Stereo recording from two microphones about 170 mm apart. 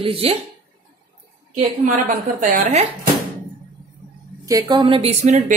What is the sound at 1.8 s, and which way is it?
Speech, 50° right (ahead or behind).